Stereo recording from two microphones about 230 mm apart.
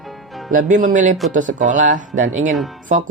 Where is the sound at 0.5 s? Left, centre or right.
Right.